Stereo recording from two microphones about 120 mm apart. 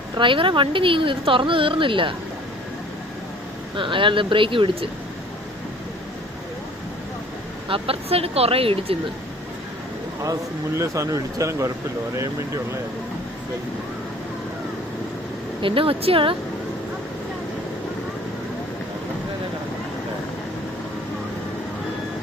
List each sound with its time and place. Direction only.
0.2 s speech: 45° right (ahead or behind)
3.8 s speech: 45° right (ahead or behind)
7.7 s speech: 55° right (ahead or behind)
10.8 s speech: 25° right (ahead or behind)
15.6 s speech: 45° right (ahead or behind)